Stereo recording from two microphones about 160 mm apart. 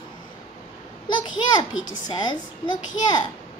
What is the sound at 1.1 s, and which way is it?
A child's voice, 30° left (ahead or behind).